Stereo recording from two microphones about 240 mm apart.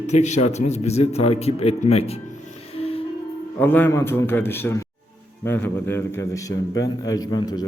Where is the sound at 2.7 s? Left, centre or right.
Left.